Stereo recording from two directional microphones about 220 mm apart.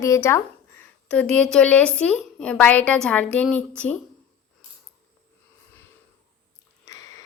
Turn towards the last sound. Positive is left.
turn(degrees=15)  # may be behind; listen again after turning